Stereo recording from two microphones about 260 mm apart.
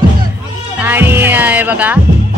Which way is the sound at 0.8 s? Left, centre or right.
Centre.